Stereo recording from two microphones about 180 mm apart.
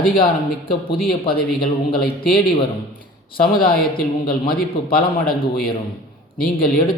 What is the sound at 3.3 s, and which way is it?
A man's voice, 55° left (ahead or behind).